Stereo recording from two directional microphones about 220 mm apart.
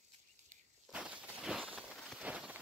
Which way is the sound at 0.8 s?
5° right (ahead or behind).